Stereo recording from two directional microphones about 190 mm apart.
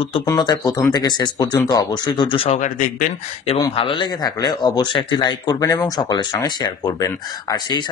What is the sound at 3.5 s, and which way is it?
Speech, 25° left (ahead or behind).